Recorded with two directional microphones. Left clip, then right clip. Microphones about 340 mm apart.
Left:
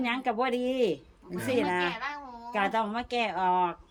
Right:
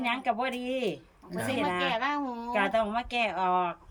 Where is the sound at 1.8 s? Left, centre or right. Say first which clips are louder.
Right 5 dB; right.